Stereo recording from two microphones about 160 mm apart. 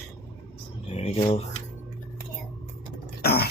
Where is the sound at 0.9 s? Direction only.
40° left (ahead or behind).